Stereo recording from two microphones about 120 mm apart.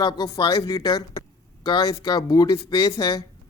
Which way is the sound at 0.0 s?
35° left (ahead or behind).